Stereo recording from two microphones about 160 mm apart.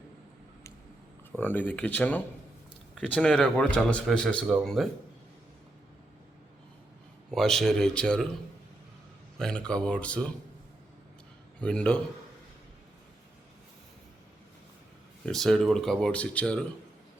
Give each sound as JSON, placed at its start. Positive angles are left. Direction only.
{"t": 1.4, "sound": "a man's voice", "side_deg": 10}
{"t": 7.3, "sound": "speech", "side_deg": 5}
{"t": 9.4, "sound": "speech", "side_deg": 5}
{"t": 11.6, "sound": "a man's voice", "side_deg": 5}
{"t": 15.3, "sound": "speech", "side_deg": 0}